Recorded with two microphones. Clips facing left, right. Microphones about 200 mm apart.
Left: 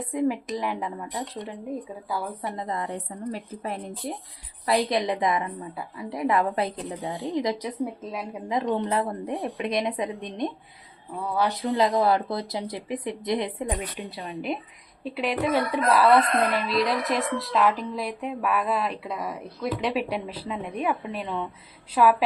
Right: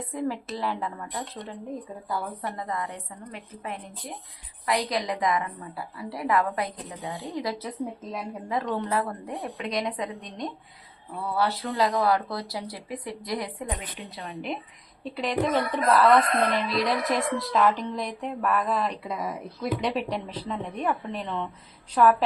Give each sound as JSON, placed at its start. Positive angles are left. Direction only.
{"t": 0.0, "sound": "speech", "side_deg": 15}
{"t": 2.6, "sound": "a woman's voice", "side_deg": 25}
{"t": 15.1, "sound": "speech", "side_deg": 5}